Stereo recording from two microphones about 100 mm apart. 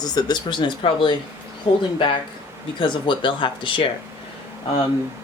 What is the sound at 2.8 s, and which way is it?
Speech, 55° left (ahead or behind).